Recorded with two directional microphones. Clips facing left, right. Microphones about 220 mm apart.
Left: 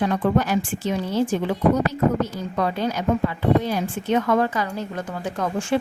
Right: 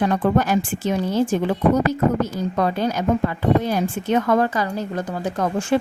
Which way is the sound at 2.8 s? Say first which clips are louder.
Right 2 dB; 45° right (ahead or behind).